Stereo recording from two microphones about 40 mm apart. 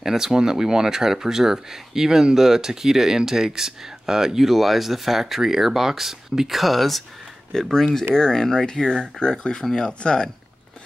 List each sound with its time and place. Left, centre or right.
0.0 s speech: centre
7.7 s speech: centre